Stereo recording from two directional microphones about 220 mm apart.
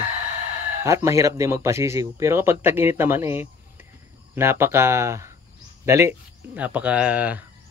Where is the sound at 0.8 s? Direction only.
15° right (ahead or behind).